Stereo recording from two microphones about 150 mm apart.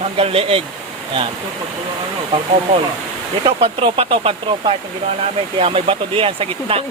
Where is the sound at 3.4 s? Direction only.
35° right (ahead or behind).